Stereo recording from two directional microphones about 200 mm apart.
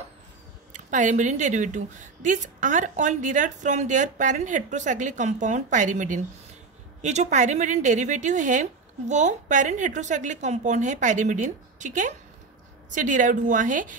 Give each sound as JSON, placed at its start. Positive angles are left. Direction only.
{"t": 0.7, "sound": "speech", "side_deg": -40}